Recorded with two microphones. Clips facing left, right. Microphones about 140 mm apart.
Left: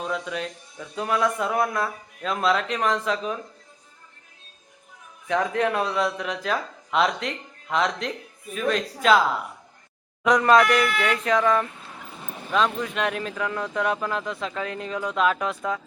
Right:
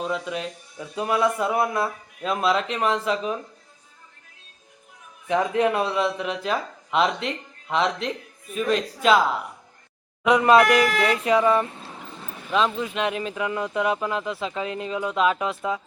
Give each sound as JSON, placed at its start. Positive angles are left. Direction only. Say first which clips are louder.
{"t": 0.0, "sound": "speech", "louder": "right 1 dB", "side_deg": -5}
{"t": 5.3, "sound": "speech", "louder": "right 2 dB", "side_deg": -10}
{"t": 10.2, "sound": "speech", "louder": "right 1 dB", "side_deg": -10}
{"t": 10.8, "sound": "speech", "louder": "right 3 dB", "side_deg": -40}
{"t": 11.2, "sound": "speech", "louder": "right 1 dB", "side_deg": -10}
{"t": 11.6, "sound": "speech", "louder": "right 2 dB", "side_deg": -35}
{"t": 12.5, "sound": "speech", "louder": "right 1 dB", "side_deg": -5}